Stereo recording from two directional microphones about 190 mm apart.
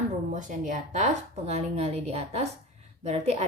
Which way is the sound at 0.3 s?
40° right (ahead or behind).